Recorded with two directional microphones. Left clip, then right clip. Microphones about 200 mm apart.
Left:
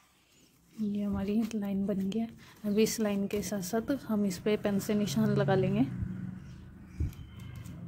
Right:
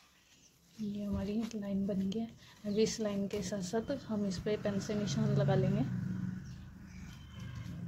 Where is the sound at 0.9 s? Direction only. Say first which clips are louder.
Left 5 dB; 35° left (ahead or behind).